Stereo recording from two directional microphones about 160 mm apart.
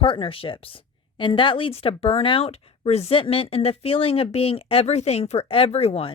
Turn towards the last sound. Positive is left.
turn(degrees=40)  # may be behind; listen again after turning